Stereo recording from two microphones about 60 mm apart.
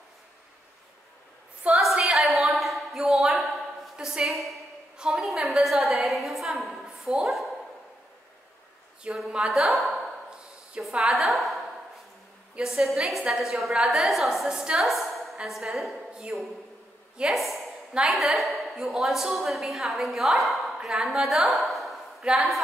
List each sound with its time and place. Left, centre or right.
1.6 s a sound: right
2.1 s a sound: centre
9.0 s a woman's voice: centre
12.5 s a woman's voice: centre
13.0 s a woman's voice: centre
17.3 s a woman's voice: centre